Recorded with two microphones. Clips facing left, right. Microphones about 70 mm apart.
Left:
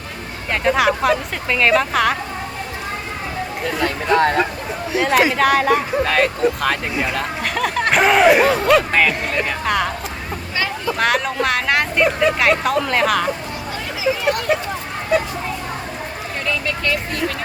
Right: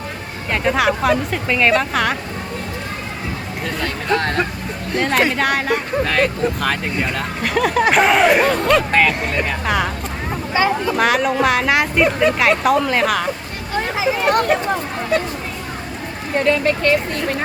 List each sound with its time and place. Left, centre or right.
0.5 s speech: centre
3.6 s speech: centre
13.7 s a sound: right
16.4 s speech: right